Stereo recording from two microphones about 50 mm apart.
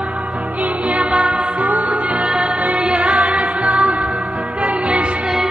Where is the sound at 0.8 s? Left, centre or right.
Right.